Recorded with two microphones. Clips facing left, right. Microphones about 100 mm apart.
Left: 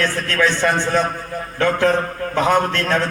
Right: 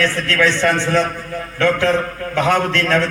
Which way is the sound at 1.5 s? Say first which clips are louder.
Right 1 dB; 40° left (ahead or behind).